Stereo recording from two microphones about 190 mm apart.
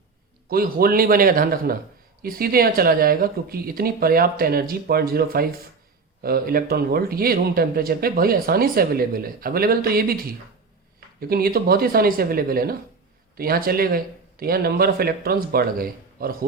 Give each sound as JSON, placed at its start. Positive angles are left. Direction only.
{"t": 0.4, "sound": "speech", "side_deg": -50}
{"t": 11.2, "sound": "speech", "side_deg": -50}